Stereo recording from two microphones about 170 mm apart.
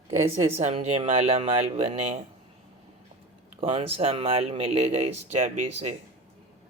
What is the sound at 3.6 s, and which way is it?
Speech, 35° right (ahead or behind).